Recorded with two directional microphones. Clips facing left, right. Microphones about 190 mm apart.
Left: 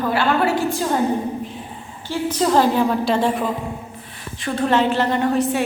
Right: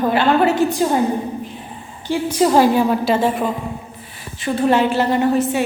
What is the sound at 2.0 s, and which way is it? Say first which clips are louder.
A woman's voice: right 4 dB; 15° right (ahead or behind).